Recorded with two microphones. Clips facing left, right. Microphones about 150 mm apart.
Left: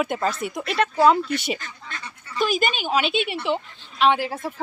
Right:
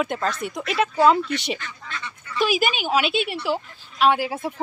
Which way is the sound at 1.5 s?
45° left (ahead or behind).